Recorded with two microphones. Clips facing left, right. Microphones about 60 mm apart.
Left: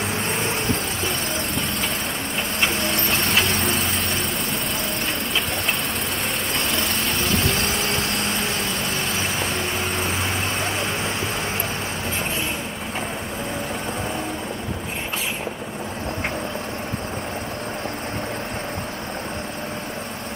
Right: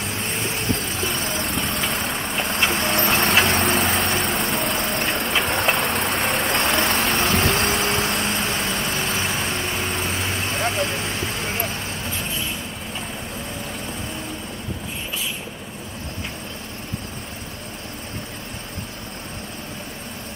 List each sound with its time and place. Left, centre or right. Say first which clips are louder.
0.7 s vehicle: even; centre
3.1 s vehicle: right 4 dB; right
7.7 s vehicle: right 2 dB; centre